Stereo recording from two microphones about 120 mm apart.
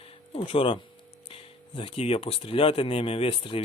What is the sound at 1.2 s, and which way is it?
Speech, 50° left (ahead or behind).